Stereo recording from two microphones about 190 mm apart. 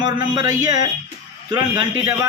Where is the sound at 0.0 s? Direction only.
20° right (ahead or behind).